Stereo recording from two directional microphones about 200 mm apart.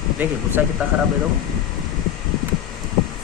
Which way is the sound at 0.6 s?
5° right (ahead or behind).